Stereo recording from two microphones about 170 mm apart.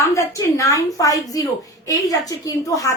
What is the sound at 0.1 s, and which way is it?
A woman's voice, 20° left (ahead or behind).